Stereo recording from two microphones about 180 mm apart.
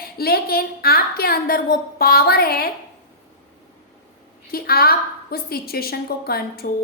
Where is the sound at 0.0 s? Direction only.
60° left (ahead or behind).